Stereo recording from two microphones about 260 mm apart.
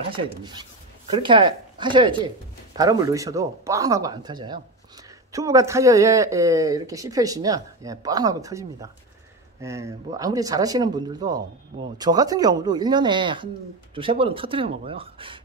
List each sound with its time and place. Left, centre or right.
0.0 s speech: centre